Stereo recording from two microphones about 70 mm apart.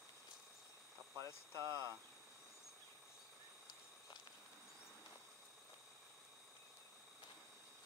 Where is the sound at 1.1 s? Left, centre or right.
Right.